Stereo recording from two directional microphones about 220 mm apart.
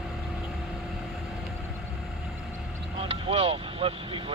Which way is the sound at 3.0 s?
25° right (ahead or behind).